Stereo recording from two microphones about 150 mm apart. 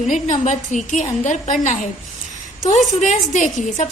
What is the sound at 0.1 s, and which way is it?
A woman's voice, 55° left (ahead or behind).